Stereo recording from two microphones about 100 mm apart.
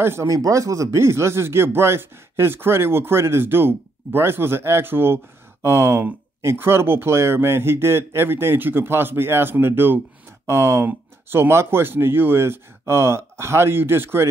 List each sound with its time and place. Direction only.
0.0 s speech: 25° right (ahead or behind)